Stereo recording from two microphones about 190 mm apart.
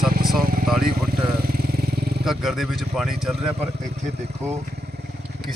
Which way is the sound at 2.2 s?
Centre (ahead or behind).